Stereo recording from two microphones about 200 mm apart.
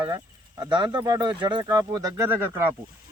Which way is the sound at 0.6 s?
20° right (ahead or behind).